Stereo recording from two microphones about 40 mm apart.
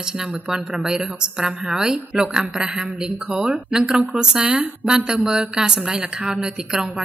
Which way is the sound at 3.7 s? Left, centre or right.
Centre.